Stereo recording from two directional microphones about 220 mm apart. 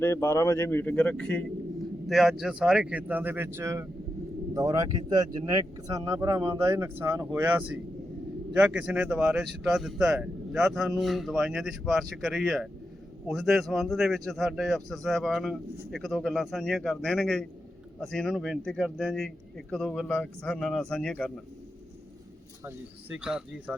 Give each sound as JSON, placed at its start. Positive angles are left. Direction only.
{"t": 0.0, "sound": "a man's voice", "side_deg": 10}
{"t": 22.6, "sound": "a man's voice", "side_deg": -5}